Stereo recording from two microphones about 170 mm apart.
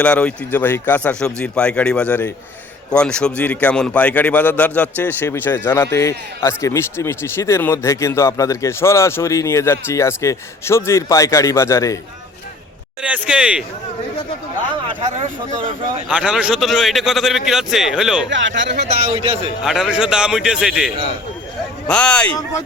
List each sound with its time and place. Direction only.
0.0 s speech: 5° left (ahead or behind)
13.0 s speech: 5° right (ahead or behind)
16.0 s a man's voice: 5° right (ahead or behind)
18.3 s speech: 90° right
18.8 s speech: 40° right (ahead or behind)
19.6 s a man's voice: centre (ahead or behind)